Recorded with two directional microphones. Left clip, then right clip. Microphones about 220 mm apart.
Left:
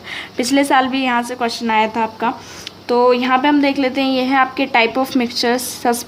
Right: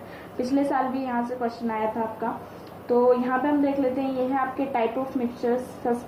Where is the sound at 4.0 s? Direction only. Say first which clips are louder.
Left 10 dB; 40° left (ahead or behind).